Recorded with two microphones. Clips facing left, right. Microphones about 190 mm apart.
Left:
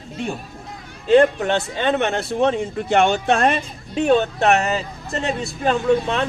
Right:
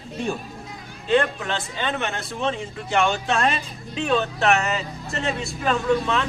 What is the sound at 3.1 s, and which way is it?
Speech, 50° left (ahead or behind).